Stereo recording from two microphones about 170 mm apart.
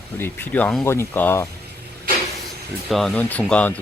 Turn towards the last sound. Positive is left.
turn(degrees=10)  # may be behind; listen again after turning